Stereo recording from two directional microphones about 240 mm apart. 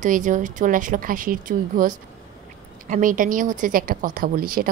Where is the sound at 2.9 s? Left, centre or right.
Right.